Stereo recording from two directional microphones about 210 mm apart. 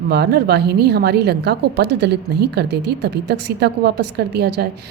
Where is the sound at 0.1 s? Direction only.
55° right (ahead or behind).